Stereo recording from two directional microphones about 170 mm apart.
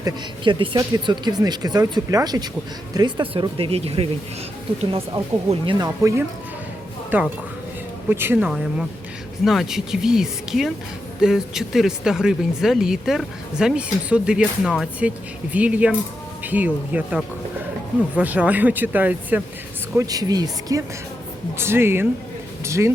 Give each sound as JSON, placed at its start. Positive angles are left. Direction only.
{"t": 0.0, "sound": "speech", "side_deg": -30}
{"t": 20.0, "sound": "speech", "side_deg": -20}